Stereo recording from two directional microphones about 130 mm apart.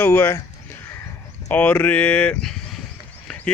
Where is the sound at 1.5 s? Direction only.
15° left (ahead or behind).